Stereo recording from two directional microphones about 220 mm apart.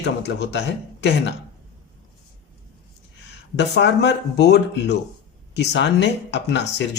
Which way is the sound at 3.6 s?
50° left (ahead or behind).